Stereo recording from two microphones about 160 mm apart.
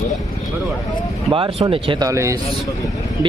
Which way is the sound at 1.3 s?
35° right (ahead or behind).